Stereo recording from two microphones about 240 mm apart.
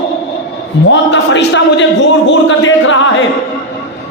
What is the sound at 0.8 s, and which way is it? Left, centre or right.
A man's voice, left.